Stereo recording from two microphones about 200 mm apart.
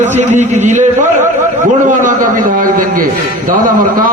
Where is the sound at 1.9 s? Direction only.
40° right (ahead or behind).